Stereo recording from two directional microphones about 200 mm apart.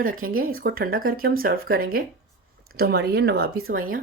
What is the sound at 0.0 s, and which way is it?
Speech, 45° right (ahead or behind).